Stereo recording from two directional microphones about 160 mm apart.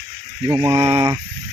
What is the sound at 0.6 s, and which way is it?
Speech, 20° right (ahead or behind).